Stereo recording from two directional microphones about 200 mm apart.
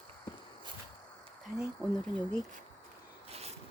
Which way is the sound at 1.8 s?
5° left (ahead or behind).